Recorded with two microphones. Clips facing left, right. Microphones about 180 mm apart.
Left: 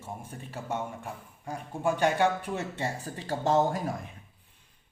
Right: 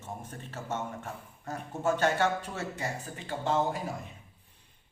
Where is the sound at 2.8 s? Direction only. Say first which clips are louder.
Left 3 dB; 35° left (ahead or behind).